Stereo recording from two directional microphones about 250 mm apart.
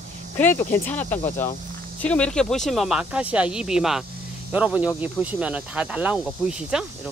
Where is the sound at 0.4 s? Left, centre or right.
Centre.